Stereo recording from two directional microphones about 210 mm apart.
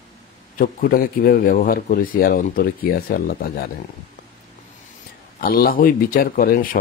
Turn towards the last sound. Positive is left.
turn(degrees=45)  # may be behind; listen again after turning